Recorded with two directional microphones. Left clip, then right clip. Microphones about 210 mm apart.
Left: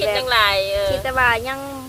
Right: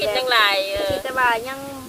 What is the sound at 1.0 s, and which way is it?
Speech, 50° left (ahead or behind).